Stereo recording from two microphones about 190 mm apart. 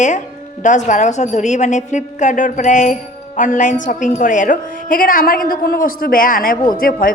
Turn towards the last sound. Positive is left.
turn(degrees=45)  # may be behind; listen again after turning